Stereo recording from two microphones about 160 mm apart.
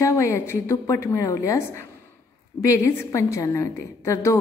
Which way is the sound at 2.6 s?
15° left (ahead or behind).